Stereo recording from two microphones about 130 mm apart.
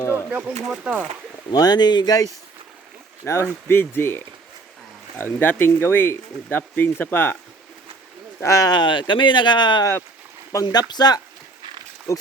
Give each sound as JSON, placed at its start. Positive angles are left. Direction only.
{"t": 0.3, "sound": "speech", "side_deg": -10}
{"t": 1.5, "sound": "speech", "side_deg": 30}
{"t": 3.4, "sound": "speech", "side_deg": 15}
{"t": 8.4, "sound": "speech", "side_deg": 25}